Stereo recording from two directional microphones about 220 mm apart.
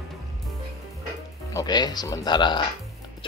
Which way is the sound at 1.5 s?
15° left (ahead or behind).